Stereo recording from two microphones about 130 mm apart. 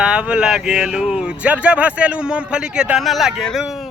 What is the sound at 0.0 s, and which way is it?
Speech, 5° right (ahead or behind).